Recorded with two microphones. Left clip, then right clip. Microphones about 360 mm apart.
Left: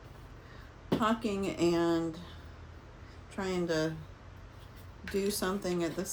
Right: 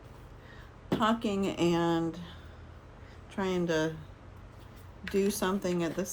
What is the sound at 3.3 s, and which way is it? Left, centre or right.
Speech, right.